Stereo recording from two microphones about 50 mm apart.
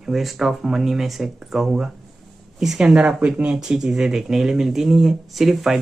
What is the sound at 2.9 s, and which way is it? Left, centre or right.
Speech, right.